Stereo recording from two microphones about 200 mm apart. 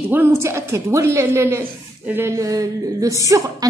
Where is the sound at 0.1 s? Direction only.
10° right (ahead or behind).